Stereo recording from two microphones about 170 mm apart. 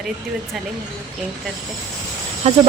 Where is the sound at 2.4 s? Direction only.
40° right (ahead or behind).